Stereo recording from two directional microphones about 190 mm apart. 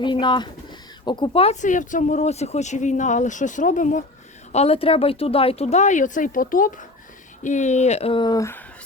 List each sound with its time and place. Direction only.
0.0 s speech: 25° left (ahead or behind); by 4.0 s 40° left (ahead or behind)
4.5 s speech: 30° left (ahead or behind); by 8.6 s 15° left (ahead or behind)